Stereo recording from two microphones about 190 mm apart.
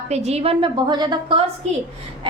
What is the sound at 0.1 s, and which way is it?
A woman's voice, 35° right (ahead or behind).